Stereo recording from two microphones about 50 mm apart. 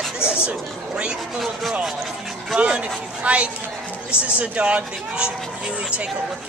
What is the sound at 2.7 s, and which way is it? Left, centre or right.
Speech, centre.